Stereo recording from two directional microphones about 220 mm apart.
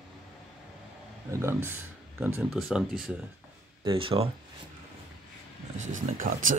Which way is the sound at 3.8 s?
25° right (ahead or behind).